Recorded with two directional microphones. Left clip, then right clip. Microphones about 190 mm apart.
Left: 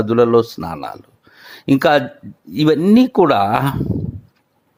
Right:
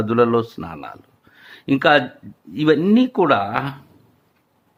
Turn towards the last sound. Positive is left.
turn(degrees=35)  # may be behind; listen again after turning